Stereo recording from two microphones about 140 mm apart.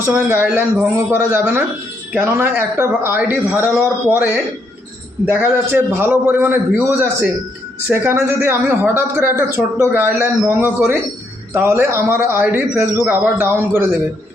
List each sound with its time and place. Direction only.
0.0 s a man's voice: 15° right (ahead or behind)